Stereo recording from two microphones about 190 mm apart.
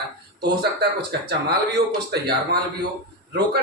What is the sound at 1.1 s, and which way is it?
A man's voice, 55° right (ahead or behind).